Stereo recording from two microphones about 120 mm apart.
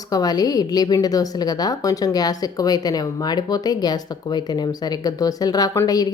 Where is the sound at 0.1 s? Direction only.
30° left (ahead or behind).